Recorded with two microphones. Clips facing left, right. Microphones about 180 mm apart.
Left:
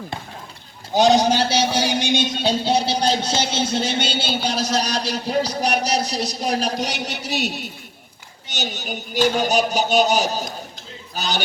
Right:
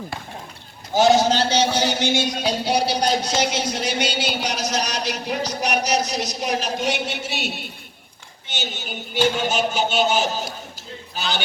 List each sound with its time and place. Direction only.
0.9 s a man's voice: 15° left (ahead or behind)
2.3 s music: 25° left (ahead or behind)
11.1 s a man's voice: 40° left (ahead or behind)